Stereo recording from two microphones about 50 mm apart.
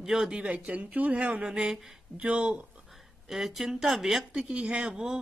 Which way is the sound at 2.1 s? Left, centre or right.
Right.